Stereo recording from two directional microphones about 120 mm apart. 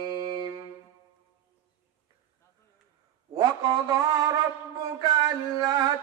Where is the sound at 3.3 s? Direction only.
35° right (ahead or behind).